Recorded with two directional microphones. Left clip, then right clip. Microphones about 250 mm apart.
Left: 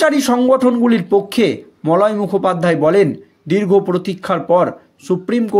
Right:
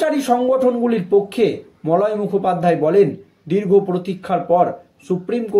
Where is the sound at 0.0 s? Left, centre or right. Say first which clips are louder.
Left 3 dB; left.